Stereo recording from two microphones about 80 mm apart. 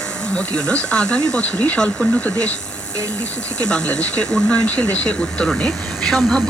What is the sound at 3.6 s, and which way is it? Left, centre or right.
Speech, centre.